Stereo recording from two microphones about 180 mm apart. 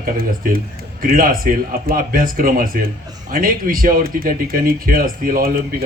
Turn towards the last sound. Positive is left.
turn(degrees=-55)  # may be behind; listen again after turning